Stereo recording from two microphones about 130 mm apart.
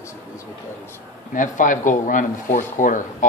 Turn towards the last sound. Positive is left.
turn(degrees=85)